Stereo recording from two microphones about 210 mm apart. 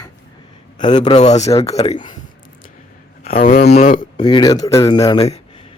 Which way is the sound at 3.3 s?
40° left (ahead or behind).